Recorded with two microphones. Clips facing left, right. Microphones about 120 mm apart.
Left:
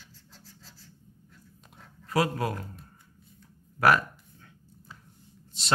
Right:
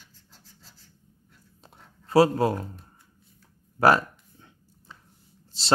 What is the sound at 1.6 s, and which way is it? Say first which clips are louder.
Writing: right 2 dB; 30° right (ahead or behind).